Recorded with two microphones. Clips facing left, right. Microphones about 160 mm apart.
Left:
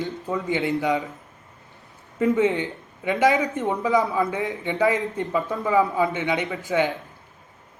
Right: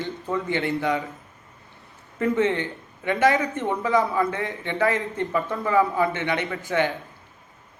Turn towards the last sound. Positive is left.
turn(degrees=20)  # may be behind; listen again after turning